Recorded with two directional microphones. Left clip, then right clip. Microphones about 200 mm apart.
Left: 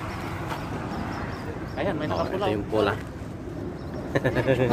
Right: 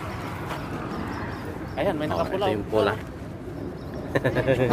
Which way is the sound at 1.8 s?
55° right (ahead or behind).